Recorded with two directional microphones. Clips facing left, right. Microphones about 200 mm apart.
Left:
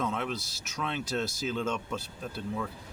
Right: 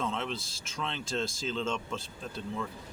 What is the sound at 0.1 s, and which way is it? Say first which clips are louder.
Speech: left 2 dB; 5° left (ahead or behind).